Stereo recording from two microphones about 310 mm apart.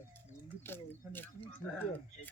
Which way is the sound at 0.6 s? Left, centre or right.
Centre.